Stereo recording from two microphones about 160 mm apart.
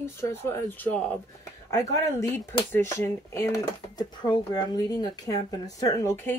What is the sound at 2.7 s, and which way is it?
Speech, 15° left (ahead or behind).